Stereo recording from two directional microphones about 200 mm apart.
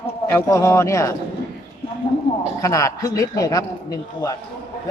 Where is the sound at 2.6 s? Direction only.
15° left (ahead or behind).